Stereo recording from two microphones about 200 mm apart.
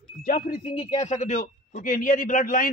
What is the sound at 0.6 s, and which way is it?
A man's voice, 25° left (ahead or behind).